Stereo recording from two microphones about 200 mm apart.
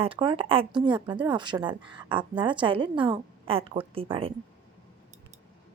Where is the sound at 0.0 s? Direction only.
25° right (ahead or behind).